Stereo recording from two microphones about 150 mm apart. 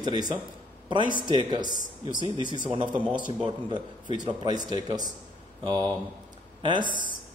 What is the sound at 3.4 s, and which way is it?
Speech, 30° right (ahead or behind).